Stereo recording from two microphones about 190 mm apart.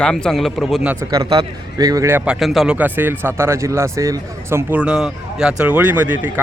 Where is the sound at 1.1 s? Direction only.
20° right (ahead or behind).